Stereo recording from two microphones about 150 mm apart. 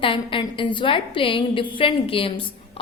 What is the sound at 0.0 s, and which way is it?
A woman's voice, 35° left (ahead or behind).